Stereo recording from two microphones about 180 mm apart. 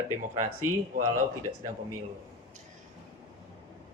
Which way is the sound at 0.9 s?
50° right (ahead or behind).